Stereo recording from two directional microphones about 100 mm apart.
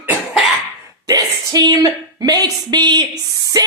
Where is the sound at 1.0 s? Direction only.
40° right (ahead or behind).